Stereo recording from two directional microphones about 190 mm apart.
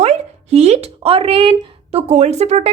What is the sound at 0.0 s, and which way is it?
Speech, 35° right (ahead or behind).